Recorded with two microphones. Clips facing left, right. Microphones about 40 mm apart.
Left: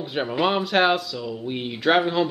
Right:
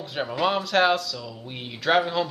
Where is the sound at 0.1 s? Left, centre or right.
Centre.